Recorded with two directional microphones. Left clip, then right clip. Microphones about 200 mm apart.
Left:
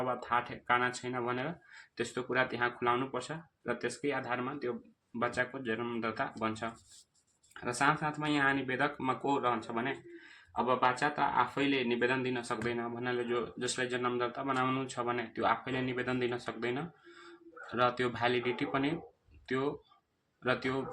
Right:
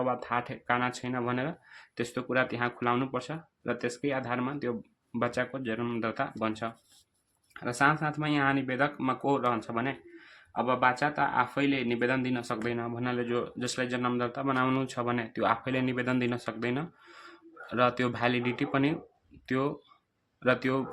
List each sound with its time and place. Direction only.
0.0 s speech: 50° right (ahead or behind)